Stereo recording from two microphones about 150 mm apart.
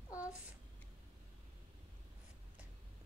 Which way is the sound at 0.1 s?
10° right (ahead or behind).